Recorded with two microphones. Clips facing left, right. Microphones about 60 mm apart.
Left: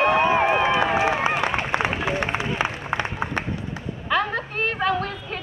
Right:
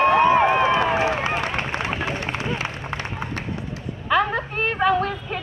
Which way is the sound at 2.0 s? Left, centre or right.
Left.